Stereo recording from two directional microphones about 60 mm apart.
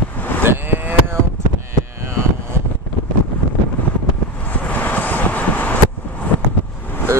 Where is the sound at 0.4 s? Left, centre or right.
Right.